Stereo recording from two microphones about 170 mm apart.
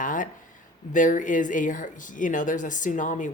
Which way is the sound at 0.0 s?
50° left (ahead or behind).